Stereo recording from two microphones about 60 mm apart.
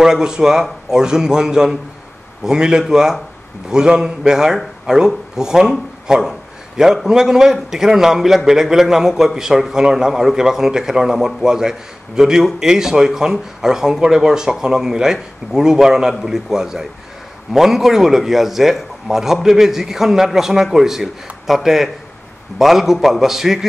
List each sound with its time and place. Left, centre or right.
0.0 s a man's voice: centre